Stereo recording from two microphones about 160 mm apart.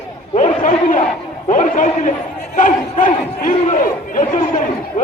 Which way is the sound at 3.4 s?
55° left (ahead or behind).